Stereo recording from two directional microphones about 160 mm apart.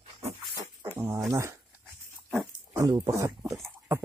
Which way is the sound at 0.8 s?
15° right (ahead or behind).